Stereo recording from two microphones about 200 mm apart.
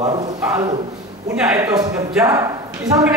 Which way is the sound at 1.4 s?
5° right (ahead or behind).